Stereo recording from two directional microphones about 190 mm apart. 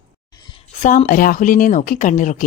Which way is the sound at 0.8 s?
40° left (ahead or behind).